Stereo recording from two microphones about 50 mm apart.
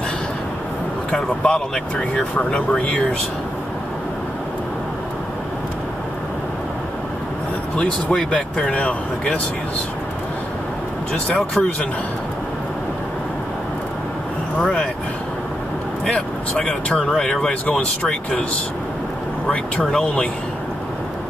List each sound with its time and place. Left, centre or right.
1.1 s speech: centre
7.7 s speech: centre
11.3 s speech: left
14.6 s speech: left
16.2 s speech: left